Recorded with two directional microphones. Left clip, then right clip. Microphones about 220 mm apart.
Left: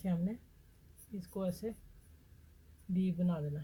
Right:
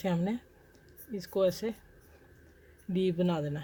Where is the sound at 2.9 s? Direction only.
45° right (ahead or behind).